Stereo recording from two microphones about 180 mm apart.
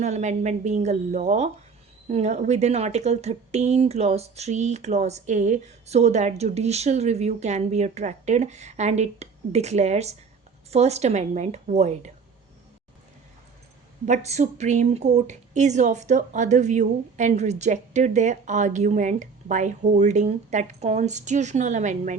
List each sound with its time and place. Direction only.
0.0 s speech: 40° right (ahead or behind)
14.0 s speech: 40° right (ahead or behind)